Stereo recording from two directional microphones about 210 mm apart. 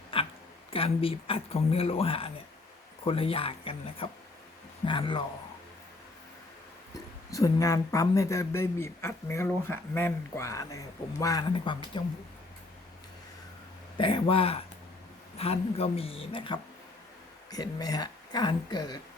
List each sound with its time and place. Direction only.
0.1 s a sound: 25° left (ahead or behind)
0.7 s speech: 25° left (ahead or behind)
7.3 s a man's voice: 15° left (ahead or behind)
14.0 s speech: 25° left (ahead or behind)